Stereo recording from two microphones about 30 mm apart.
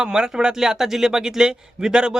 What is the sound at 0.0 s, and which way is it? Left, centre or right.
Speech, right.